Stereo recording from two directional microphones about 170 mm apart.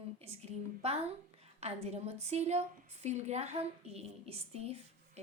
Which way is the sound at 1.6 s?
40° right (ahead or behind).